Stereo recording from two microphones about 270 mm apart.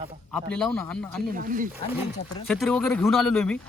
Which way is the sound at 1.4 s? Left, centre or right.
Right.